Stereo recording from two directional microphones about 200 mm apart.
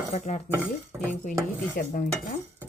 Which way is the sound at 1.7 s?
45° left (ahead or behind).